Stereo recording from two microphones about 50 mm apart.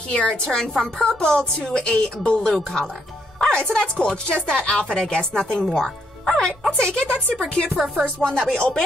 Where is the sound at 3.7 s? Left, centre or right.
Centre.